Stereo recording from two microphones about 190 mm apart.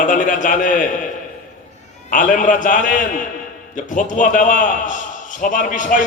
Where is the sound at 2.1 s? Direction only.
45° left (ahead or behind).